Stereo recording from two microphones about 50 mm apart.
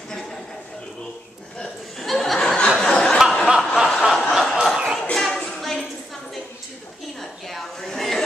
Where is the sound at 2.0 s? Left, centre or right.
Centre.